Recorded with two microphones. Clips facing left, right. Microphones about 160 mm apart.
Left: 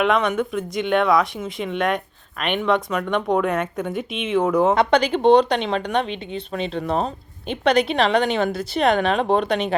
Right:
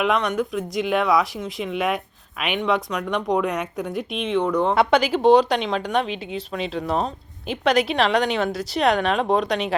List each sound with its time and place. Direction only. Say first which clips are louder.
0.0 s speech: left 2 dB; centre (ahead or behind)